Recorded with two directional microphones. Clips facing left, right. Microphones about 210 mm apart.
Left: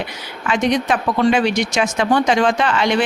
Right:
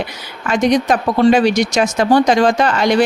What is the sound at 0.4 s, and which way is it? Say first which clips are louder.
Speech: right 4 dB; 40° right (ahead or behind).